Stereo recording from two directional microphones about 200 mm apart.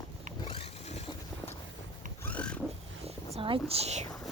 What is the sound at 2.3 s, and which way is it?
Vehicle, 5° left (ahead or behind).